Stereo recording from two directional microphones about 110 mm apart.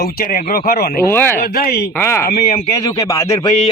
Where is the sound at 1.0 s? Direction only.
20° left (ahead or behind).